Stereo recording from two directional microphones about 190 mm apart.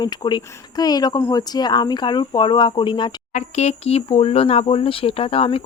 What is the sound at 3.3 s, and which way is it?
Speech, 35° left (ahead or behind).